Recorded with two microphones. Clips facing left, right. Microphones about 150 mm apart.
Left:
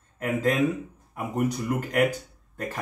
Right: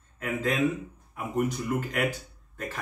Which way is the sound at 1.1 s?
40° left (ahead or behind).